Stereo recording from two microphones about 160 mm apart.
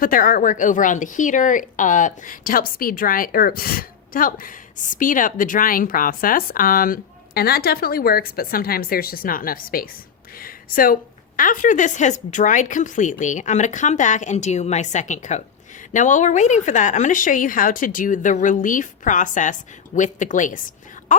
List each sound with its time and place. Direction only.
0.0 s a woman's voice: 60° left (ahead or behind)